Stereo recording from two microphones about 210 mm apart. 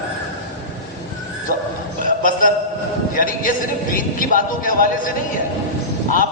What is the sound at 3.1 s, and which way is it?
A man's voice, 40° left (ahead or behind).